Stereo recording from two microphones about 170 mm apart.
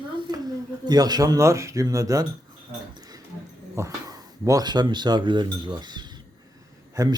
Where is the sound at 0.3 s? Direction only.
20° right (ahead or behind).